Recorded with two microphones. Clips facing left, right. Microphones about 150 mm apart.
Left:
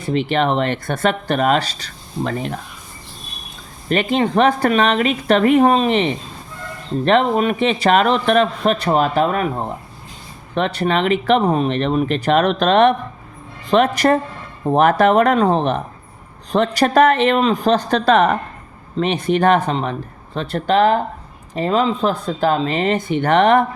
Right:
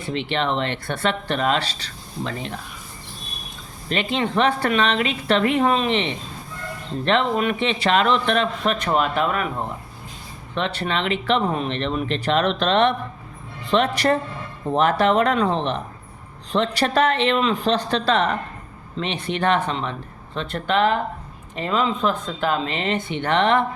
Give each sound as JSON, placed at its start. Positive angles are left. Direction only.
{"t": 0.0, "sound": "speech", "side_deg": 40}
{"t": 3.8, "sound": "a man's voice", "side_deg": 45}